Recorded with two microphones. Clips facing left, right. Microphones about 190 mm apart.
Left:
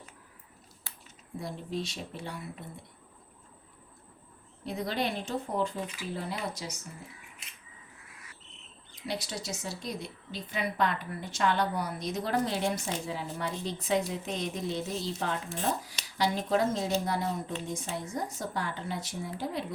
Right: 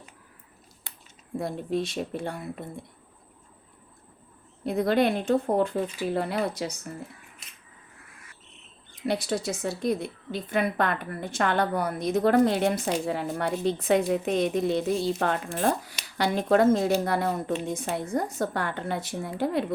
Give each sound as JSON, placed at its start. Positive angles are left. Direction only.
{"t": 0.9, "sound": "a sound", "side_deg": -15}
{"t": 1.4, "sound": "speech", "side_deg": -55}
{"t": 4.6, "sound": "a woman's voice", "side_deg": -55}
{"t": 8.9, "sound": "a woman's voice", "side_deg": -55}